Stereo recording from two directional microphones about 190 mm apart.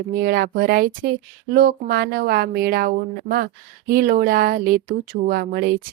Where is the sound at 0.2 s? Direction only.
55° right (ahead or behind).